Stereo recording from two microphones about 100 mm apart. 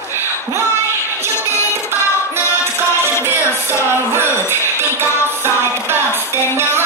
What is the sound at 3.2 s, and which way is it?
Music, 25° right (ahead or behind).